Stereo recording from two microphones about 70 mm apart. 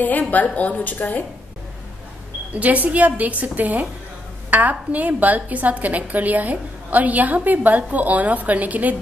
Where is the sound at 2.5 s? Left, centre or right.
Right.